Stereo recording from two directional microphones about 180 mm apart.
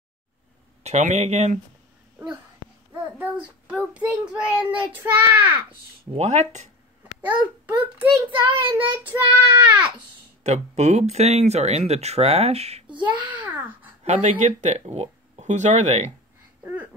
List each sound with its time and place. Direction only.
0.8 s speech: 40° right (ahead or behind)
2.9 s child singing: 5° right (ahead or behind)
6.1 s speech: 40° right (ahead or behind)
7.2 s a child's voice: 10° right (ahead or behind)
8.7 s child singing: 10° right (ahead or behind)
10.4 s speech: 40° right (ahead or behind)
13.0 s a child's voice: 10° right (ahead or behind)
14.0 s speech: 40° right (ahead or behind)